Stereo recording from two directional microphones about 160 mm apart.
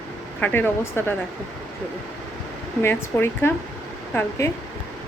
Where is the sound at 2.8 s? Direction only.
15° left (ahead or behind).